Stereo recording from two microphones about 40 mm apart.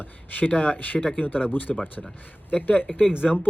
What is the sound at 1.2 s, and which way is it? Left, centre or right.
Speech, left.